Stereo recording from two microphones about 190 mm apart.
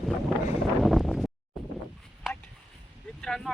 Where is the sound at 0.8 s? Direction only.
Centre (ahead or behind).